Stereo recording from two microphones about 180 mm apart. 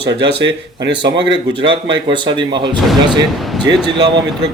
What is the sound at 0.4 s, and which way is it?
Speech, 75° right (ahead or behind).